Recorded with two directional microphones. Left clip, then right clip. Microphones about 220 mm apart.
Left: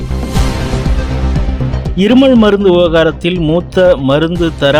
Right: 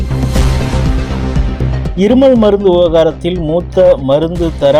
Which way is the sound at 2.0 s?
25° left (ahead or behind).